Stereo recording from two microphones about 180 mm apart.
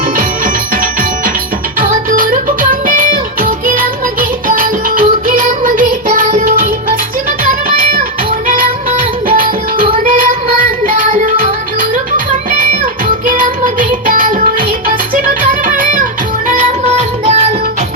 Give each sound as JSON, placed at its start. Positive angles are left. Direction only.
{"t": 0.2, "sound": "music", "side_deg": -50}
{"t": 9.3, "sound": "music", "side_deg": -45}
{"t": 15.6, "sound": "music", "side_deg": -50}